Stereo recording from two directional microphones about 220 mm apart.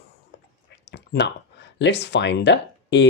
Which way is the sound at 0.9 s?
50° left (ahead or behind).